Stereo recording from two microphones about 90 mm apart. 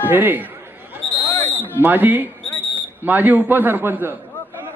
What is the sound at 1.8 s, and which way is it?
A man's voice, 20° right (ahead or behind).